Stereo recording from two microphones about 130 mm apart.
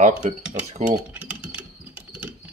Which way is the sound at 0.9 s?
10° right (ahead or behind).